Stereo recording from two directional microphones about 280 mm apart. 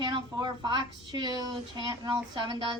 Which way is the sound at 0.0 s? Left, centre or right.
Centre.